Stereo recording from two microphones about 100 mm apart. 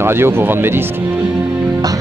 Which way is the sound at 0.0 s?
25° right (ahead or behind).